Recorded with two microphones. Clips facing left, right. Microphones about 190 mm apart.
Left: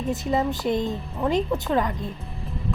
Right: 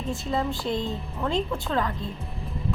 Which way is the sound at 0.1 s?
20° left (ahead or behind).